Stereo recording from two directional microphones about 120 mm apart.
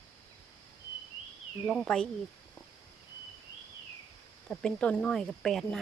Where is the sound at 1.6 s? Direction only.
5° left (ahead or behind).